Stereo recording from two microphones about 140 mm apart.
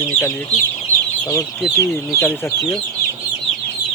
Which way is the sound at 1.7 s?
15° left (ahead or behind).